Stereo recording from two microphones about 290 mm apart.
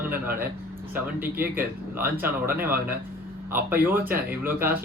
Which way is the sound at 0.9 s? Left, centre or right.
Centre.